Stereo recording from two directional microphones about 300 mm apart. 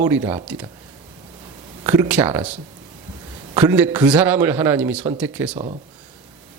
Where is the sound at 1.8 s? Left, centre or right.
Centre.